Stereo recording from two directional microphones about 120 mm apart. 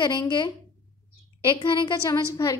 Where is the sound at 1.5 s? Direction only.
45° left (ahead or behind).